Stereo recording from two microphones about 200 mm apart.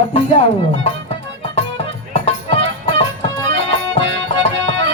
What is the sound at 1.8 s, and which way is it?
Music, 30° left (ahead or behind).